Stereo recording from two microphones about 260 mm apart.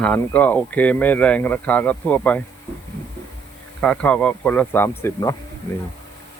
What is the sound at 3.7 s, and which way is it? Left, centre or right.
Speech, centre.